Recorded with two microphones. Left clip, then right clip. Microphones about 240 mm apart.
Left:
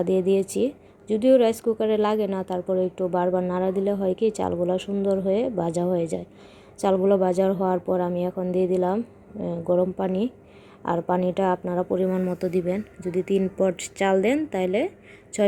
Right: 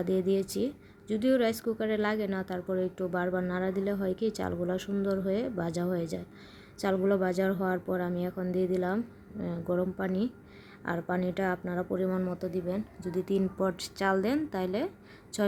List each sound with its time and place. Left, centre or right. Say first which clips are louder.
0.1 s a woman's voice: left 5 dB; centre
13.3 s a woman's voice: left 8 dB; centre